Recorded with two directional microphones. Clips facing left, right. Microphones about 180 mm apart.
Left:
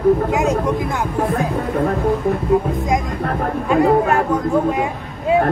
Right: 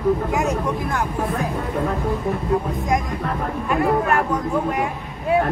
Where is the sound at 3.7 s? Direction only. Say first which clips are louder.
Left 5 dB; 25° left (ahead or behind).